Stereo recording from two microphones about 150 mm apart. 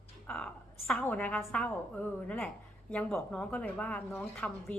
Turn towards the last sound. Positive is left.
turn(degrees=5)  # may be behind; listen again after turning